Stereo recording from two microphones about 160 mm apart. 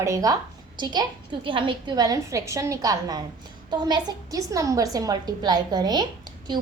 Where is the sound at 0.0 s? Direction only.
20° right (ahead or behind).